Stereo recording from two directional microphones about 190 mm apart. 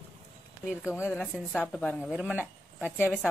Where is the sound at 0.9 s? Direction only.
15° left (ahead or behind); by 2.4 s 5° right (ahead or behind).